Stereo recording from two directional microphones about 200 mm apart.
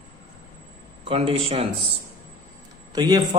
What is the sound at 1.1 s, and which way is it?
Speech, 30° right (ahead or behind).